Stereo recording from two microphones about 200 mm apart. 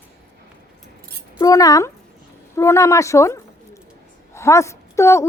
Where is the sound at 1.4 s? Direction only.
15° left (ahead or behind).